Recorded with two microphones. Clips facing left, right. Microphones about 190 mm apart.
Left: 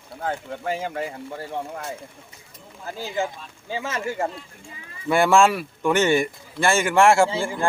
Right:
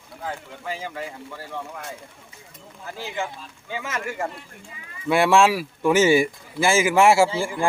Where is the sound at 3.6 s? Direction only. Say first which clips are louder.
Left 2 dB; 30° left (ahead or behind).